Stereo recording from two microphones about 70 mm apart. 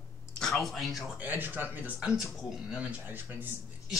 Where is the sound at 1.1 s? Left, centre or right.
Right.